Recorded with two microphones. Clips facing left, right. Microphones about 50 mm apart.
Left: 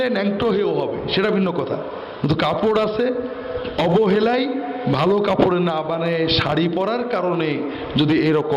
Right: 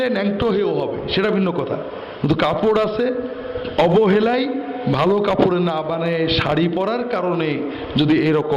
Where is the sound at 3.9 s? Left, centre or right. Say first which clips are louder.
Right 1 dB; right.